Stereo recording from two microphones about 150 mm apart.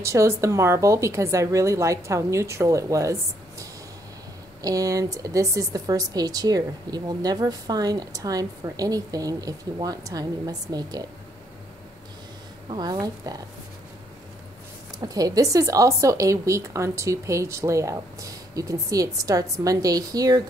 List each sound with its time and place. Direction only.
0.0 s a woman's voice: 20° right (ahead or behind)
12.6 s a woman's voice: 25° right (ahead or behind)
15.0 s a woman's voice: 25° right (ahead or behind)